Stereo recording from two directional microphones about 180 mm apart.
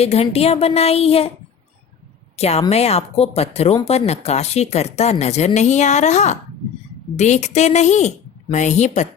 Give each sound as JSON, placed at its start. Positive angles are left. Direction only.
{"t": 0.0, "sound": "a woman's voice", "side_deg": 35}
{"t": 2.3, "sound": "a woman's voice", "side_deg": 35}